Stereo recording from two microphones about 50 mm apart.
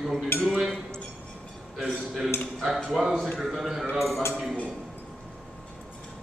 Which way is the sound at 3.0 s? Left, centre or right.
Centre.